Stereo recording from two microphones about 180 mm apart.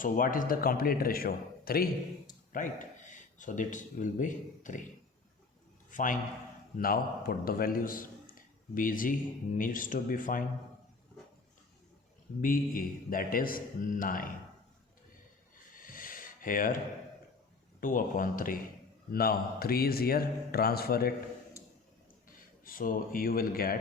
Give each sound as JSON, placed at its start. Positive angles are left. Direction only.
{"t": 0.0, "sound": "speech", "side_deg": 50}
{"t": 5.9, "sound": "a man's voice", "side_deg": 50}
{"t": 12.4, "sound": "a man's voice", "side_deg": 50}
{"t": 15.7, "sound": "a sound", "side_deg": 50}
{"t": 17.7, "sound": "a man's voice", "side_deg": 50}
{"t": 22.6, "sound": "a man's voice", "side_deg": 50}